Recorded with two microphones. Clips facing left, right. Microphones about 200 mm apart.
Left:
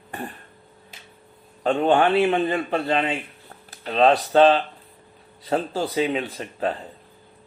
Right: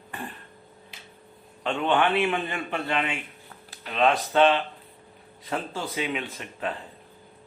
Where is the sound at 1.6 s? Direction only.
40° left (ahead or behind).